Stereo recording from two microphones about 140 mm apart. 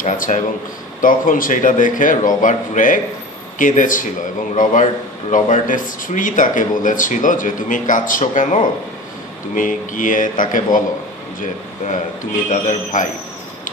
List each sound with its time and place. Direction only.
0.0 s a man's voice: 65° left (ahead or behind)
1.0 s speech: 75° left (ahead or behind)
12.4 s a man's voice: 60° left (ahead or behind)